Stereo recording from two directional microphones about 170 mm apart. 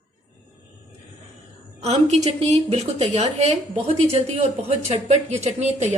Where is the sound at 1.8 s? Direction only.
40° right (ahead or behind).